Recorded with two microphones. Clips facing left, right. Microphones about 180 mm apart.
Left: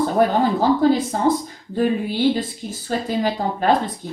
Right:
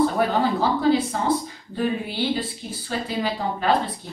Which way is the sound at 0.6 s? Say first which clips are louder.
Left 4 dB; 45° left (ahead or behind).